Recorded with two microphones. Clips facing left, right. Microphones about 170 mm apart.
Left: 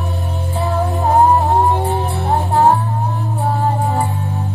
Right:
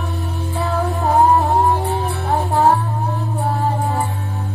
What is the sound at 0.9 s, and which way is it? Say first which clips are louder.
Music: left 1 dB; 20° left (ahead or behind).